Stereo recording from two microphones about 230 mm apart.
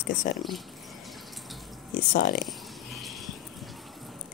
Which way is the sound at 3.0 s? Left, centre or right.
Centre.